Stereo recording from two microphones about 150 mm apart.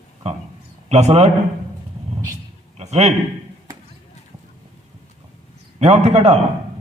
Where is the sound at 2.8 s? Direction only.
50° right (ahead or behind).